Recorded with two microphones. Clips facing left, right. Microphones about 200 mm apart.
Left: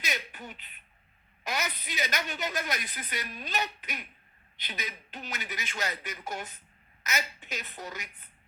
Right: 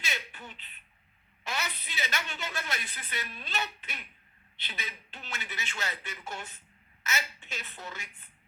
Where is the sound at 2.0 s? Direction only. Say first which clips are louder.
Left 2 dB; 40° left (ahead or behind).